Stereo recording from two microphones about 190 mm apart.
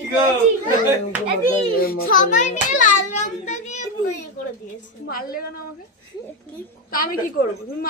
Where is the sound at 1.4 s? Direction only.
50° left (ahead or behind).